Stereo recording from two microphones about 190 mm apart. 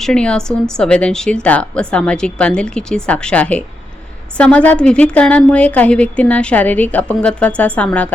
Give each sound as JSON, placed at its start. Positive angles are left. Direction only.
{"t": 0.0, "sound": "a woman's voice", "side_deg": 5}